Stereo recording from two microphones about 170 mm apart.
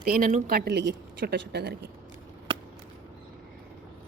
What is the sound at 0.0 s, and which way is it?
Speech, 55° right (ahead or behind).